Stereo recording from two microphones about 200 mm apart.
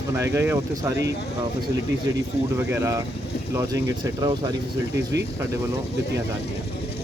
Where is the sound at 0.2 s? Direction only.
15° right (ahead or behind).